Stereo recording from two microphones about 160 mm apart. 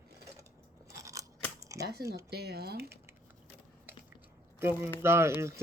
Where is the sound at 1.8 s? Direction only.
85° right.